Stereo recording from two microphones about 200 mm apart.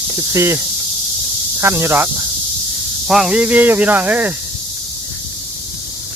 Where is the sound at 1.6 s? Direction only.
15° right (ahead or behind).